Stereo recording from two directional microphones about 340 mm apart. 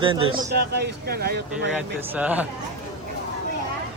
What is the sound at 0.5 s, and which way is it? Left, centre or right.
Speech, right.